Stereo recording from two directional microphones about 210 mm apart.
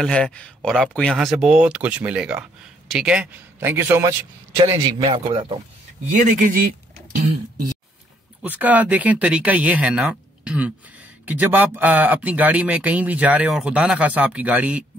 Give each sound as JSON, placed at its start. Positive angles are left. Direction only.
{"t": 0.0, "sound": "speech", "side_deg": 5}
{"t": 6.1, "sound": "speech", "side_deg": -40}
{"t": 8.4, "sound": "speech", "side_deg": -10}